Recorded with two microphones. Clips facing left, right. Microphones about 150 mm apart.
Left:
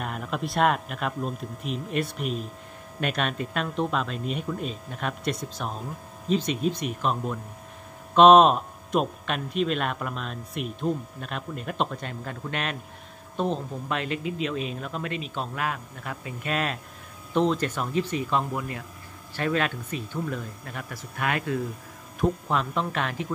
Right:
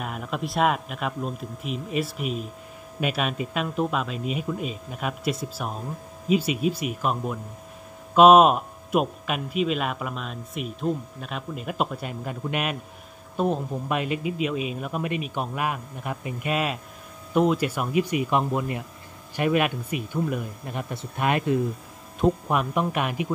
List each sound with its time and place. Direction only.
0.0 s a man's voice: centre (ahead or behind)